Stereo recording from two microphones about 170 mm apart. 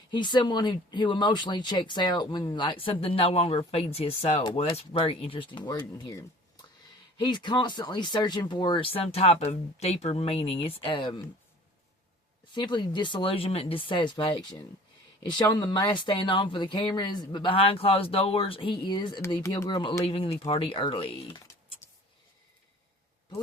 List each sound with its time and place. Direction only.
0.1 s speech: 25° left (ahead or behind)
12.5 s speech: 25° left (ahead or behind)
15.5 s speech: 25° left (ahead or behind)
21.8 s tick-tock: 10° left (ahead or behind)